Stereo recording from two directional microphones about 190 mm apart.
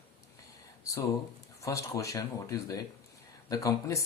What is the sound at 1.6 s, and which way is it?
Speech, 15° left (ahead or behind).